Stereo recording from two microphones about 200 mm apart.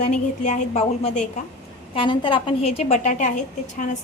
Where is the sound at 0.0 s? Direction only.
35° left (ahead or behind).